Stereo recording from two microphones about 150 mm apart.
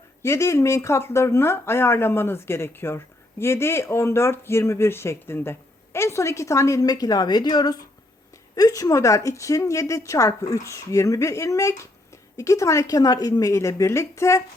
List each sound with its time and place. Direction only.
0.2 s a woman's voice: 20° left (ahead or behind)